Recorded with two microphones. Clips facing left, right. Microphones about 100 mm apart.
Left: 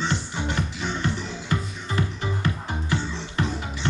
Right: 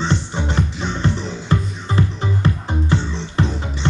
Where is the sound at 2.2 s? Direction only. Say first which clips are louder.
Right 6 dB; 25° right (ahead or behind).